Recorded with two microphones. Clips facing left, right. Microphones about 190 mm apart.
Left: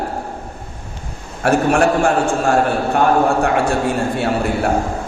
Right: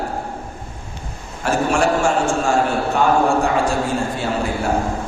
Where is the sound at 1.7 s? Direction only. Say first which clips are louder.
Left 3 dB; 60° left (ahead or behind).